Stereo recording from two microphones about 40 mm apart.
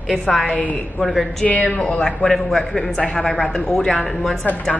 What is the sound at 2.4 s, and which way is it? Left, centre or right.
A woman's voice, centre.